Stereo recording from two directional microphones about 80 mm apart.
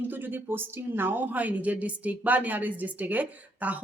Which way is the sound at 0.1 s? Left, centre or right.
Right.